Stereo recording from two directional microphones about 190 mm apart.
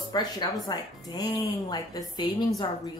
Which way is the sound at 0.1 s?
20° left (ahead or behind).